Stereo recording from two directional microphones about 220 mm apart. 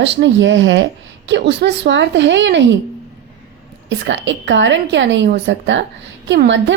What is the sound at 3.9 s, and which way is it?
Speech, 55° right (ahead or behind).